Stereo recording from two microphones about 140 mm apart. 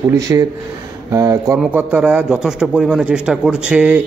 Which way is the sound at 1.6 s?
10° right (ahead or behind).